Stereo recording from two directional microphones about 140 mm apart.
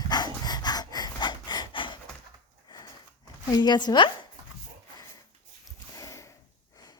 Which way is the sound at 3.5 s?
30° left (ahead or behind).